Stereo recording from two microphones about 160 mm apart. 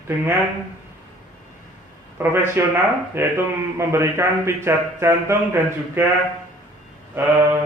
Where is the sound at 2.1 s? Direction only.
15° right (ahead or behind).